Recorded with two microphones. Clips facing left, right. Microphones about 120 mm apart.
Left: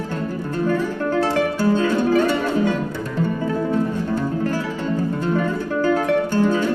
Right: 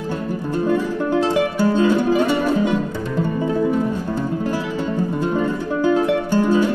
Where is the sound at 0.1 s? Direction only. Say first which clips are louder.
Right 5 dB; 15° right (ahead or behind).